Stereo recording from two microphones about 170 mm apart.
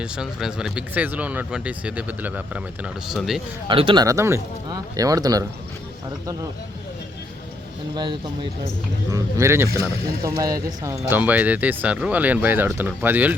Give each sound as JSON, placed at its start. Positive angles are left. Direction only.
{"t": 0.0, "sound": "speech", "side_deg": -5}
{"t": 3.7, "sound": "speech", "side_deg": -30}
{"t": 7.9, "sound": "speech", "side_deg": -25}